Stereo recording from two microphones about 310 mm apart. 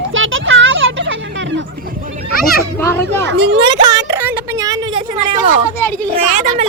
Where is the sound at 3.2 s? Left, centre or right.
Right.